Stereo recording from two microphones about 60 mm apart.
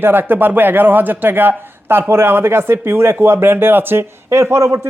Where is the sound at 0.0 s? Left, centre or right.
Right.